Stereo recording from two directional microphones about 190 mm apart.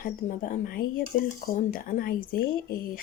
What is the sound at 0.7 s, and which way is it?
Speech, 50° left (ahead or behind).